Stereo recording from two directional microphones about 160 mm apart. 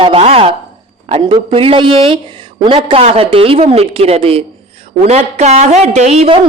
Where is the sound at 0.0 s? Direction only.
35° right (ahead or behind).